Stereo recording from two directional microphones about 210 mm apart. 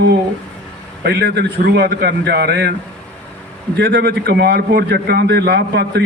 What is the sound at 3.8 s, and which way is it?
A man's voice, 50° right (ahead or behind).